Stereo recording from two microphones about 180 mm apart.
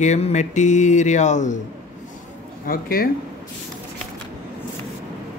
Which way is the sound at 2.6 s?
55° left (ahead or behind).